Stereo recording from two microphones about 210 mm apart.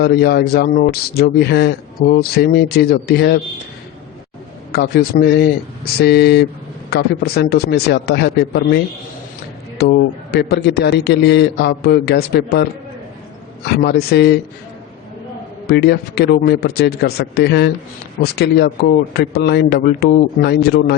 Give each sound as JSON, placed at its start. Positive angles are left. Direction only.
{"t": 0.0, "sound": "speech", "side_deg": 50}
{"t": 4.7, "sound": "speech", "side_deg": 50}
{"t": 9.8, "sound": "speech", "side_deg": 50}
{"t": 13.7, "sound": "speech", "side_deg": 50}
{"t": 15.6, "sound": "speech", "side_deg": 50}